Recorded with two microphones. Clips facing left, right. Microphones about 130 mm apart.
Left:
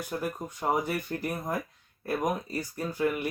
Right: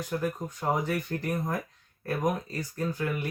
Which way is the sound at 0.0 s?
10° left (ahead or behind).